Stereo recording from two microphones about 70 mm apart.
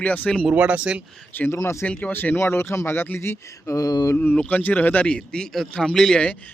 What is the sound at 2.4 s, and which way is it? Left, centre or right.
Speech, left.